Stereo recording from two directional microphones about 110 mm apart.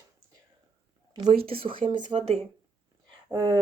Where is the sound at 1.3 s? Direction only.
60° right (ahead or behind).